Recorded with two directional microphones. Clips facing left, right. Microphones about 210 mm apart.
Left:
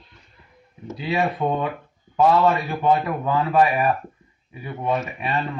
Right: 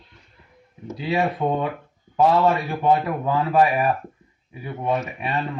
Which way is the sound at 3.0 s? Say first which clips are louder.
Even; 30° right (ahead or behind).